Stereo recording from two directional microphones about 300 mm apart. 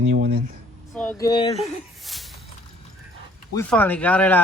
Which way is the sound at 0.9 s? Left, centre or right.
Centre.